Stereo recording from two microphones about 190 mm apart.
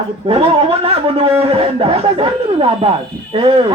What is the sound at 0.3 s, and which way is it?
A man's voice, 30° right (ahead or behind).